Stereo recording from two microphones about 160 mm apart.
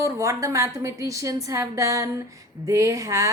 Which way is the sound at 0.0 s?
20° right (ahead or behind).